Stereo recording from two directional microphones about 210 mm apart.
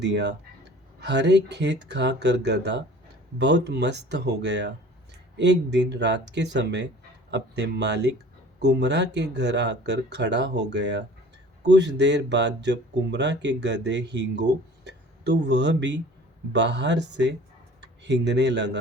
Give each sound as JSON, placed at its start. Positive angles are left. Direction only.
{"t": 0.0, "sound": "speech", "side_deg": -55}